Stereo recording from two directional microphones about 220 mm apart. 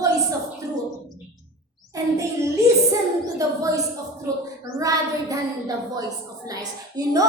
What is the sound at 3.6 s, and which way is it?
A woman's voice, 15° right (ahead or behind).